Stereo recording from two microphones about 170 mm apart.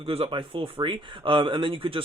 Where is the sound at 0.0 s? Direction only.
35° right (ahead or behind).